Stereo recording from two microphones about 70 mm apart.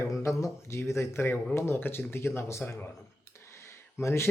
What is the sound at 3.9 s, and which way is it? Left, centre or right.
Speech, left.